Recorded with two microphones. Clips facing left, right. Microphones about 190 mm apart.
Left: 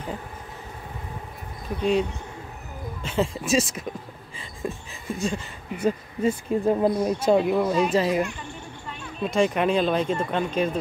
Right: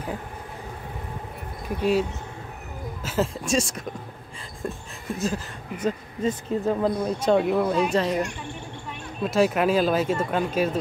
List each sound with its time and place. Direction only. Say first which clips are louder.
1.8 s speech: even; 5° right (ahead or behind)
4.4 s a sound: left 1 dB; centre (ahead or behind)
5.8 s speech: left 2 dB; 10° left (ahead or behind); by 10.8 s 5° right (ahead or behind)